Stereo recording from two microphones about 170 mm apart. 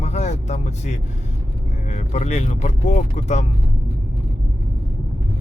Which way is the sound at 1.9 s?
40° left (ahead or behind).